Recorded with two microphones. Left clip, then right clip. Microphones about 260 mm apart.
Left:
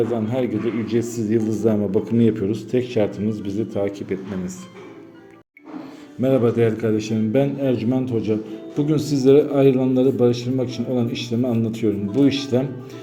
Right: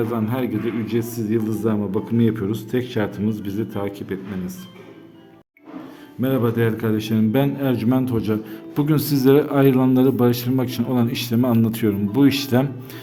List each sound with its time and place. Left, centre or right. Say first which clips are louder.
0.0 s a man's voice: left 2 dB; centre
6.2 s a man's voice: left 3 dB; centre